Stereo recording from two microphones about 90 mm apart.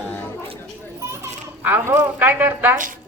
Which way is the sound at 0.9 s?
35° right (ahead or behind).